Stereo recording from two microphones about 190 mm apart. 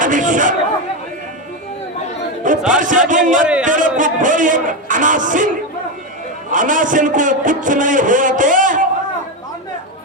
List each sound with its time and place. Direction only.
0.0 s a man's voice: 40° right (ahead or behind)
2.6 s music: 45° right (ahead or behind)
3.1 s speech: 40° right (ahead or behind)
3.6 s music: 45° right (ahead or behind)
6.5 s a man's voice: 45° right (ahead or behind)